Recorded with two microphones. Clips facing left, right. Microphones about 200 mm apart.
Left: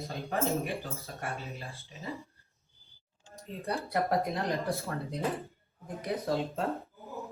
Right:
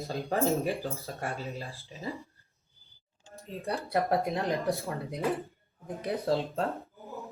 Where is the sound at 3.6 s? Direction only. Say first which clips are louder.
Right 2 dB; 30° right (ahead or behind).